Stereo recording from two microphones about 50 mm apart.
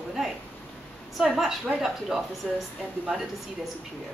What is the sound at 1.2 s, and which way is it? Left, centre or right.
A woman's voice, centre.